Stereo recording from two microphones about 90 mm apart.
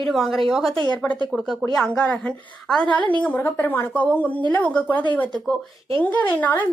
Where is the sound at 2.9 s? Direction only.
60° right (ahead or behind).